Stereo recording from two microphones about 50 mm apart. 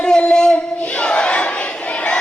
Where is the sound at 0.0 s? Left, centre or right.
Centre.